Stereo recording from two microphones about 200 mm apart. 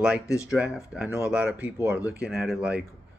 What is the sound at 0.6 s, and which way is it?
Speech, centre (ahead or behind).